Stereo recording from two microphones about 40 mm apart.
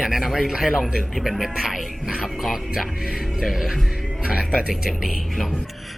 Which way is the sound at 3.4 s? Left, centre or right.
Centre.